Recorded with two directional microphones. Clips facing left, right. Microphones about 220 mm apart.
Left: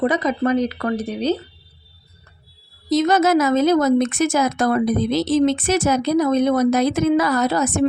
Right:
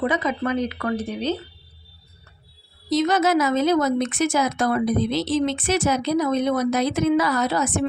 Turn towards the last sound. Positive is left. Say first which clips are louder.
# left 4 dB
turn(degrees=40)  # may be behind; listen again after turning